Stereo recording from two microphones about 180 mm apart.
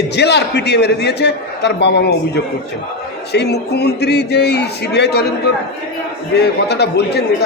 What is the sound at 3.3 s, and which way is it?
A man's voice, 65° left (ahead or behind).